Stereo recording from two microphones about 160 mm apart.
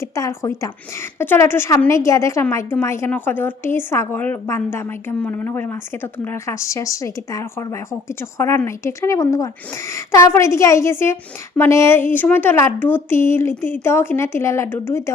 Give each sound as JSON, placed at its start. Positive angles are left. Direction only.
{"t": 0.0, "sound": "a woman's voice", "side_deg": 20}